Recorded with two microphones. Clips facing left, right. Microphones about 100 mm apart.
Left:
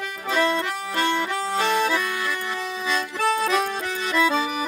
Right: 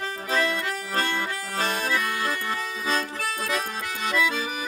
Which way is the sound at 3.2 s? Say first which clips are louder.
Left 7 dB; 25° left (ahead or behind).